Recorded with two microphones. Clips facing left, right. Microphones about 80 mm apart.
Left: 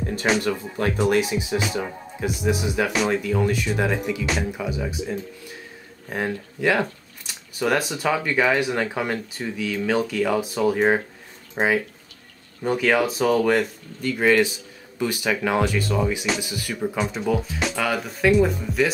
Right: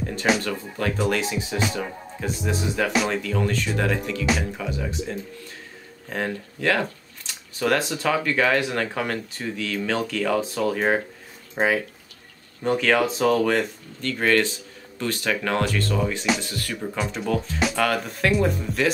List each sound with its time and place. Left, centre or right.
0.0 s music: centre
0.4 s speech: left; by 18.9 s centre